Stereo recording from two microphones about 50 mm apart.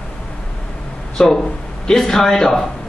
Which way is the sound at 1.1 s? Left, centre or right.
Centre.